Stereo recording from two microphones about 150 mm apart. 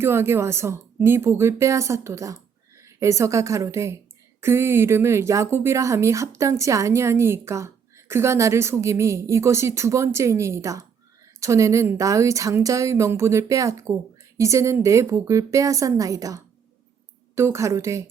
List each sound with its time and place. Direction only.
0.0 s speech: 15° right (ahead or behind)